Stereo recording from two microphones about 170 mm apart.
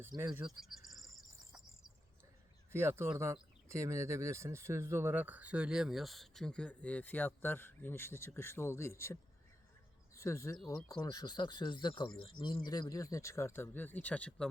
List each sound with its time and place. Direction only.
0.4 s insect: centre (ahead or behind)
2.7 s speech: 15° right (ahead or behind); by 9.1 s 15° left (ahead or behind)
10.2 s speech: 15° left (ahead or behind)